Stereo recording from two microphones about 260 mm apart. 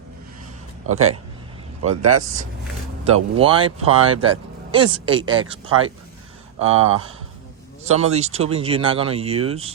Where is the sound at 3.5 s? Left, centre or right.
Right.